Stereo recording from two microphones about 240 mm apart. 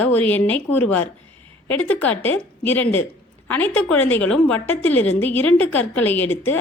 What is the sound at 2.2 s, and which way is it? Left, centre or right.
A woman's voice, centre.